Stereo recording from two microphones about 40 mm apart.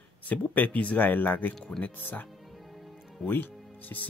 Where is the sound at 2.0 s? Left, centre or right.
Left.